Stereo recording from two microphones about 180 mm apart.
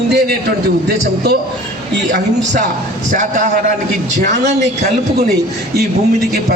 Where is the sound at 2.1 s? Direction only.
45° right (ahead or behind).